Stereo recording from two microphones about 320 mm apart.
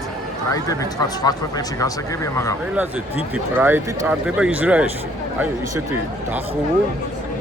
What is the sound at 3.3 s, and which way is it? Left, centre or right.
Speech, centre.